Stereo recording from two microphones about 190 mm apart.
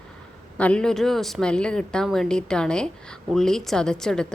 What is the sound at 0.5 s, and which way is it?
A woman's voice, 5° left (ahead or behind).